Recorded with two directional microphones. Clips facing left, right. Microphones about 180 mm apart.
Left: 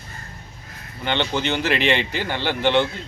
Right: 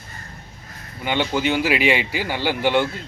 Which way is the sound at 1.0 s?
5° right (ahead or behind).